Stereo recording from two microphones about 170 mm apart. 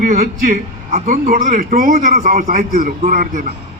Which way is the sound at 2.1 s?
60° right (ahead or behind).